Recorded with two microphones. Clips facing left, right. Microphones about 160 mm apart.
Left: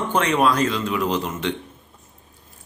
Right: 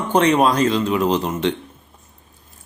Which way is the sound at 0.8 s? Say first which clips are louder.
Right 4 dB; 40° right (ahead or behind).